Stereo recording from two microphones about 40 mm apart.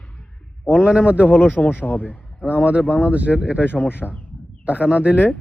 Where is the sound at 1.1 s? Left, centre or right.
Left.